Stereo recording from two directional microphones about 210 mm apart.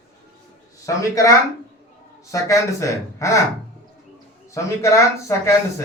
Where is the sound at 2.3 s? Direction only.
15° left (ahead or behind).